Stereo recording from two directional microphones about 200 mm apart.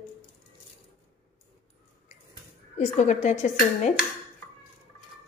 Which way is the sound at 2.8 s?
35° left (ahead or behind).